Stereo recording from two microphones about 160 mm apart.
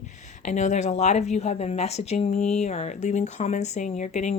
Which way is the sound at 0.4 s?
45° left (ahead or behind).